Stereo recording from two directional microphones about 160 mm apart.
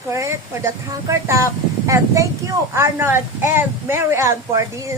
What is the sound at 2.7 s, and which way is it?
Speech, 15° right (ahead or behind).